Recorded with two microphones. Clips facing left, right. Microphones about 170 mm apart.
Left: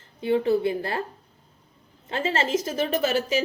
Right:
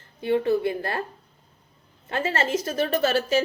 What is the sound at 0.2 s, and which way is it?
Speech, 20° left (ahead or behind).